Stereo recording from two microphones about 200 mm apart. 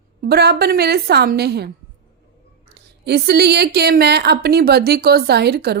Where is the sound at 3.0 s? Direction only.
55° right (ahead or behind).